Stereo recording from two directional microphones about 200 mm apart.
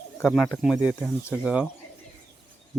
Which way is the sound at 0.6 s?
5° right (ahead or behind).